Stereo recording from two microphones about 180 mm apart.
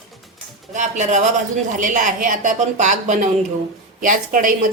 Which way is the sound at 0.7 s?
40° right (ahead or behind).